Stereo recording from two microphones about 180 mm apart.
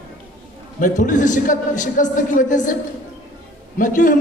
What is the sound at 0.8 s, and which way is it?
A man's voice, 45° left (ahead or behind).